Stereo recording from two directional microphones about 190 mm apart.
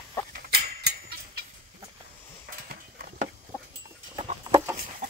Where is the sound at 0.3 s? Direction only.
55° right (ahead or behind).